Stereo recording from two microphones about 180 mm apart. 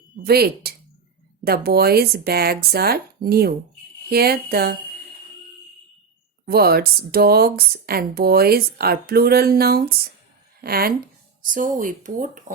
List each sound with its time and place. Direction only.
0.2 s speech: 60° right (ahead or behind)
6.4 s speech: 60° right (ahead or behind)